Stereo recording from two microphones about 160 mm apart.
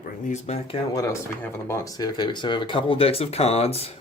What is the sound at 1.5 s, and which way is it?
Speech, 20° left (ahead or behind).